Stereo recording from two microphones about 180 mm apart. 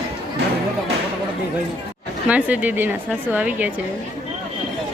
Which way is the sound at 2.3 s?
10° right (ahead or behind).